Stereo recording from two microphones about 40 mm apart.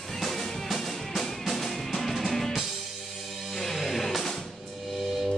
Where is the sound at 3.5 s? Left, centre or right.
Centre.